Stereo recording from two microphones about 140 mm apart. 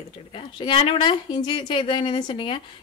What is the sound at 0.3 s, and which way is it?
A woman's voice, 40° left (ahead or behind).